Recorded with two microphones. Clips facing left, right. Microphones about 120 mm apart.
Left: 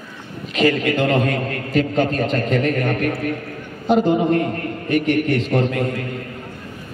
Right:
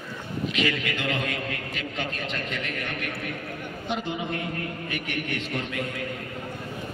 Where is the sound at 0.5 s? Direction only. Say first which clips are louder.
Left 13 dB; 40° left (ahead or behind).